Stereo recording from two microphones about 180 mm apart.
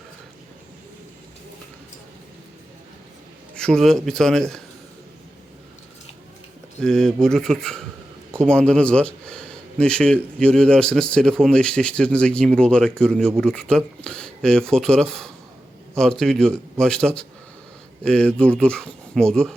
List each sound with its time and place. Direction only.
3.5 s speech: 5° left (ahead or behind)
6.7 s speech: 5° left (ahead or behind)